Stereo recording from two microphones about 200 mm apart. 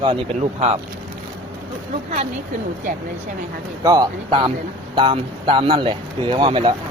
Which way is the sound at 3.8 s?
20° right (ahead or behind).